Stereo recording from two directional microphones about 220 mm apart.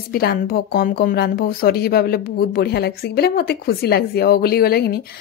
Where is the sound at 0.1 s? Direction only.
45° left (ahead or behind).